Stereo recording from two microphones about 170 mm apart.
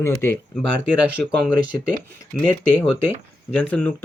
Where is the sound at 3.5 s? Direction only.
5° left (ahead or behind).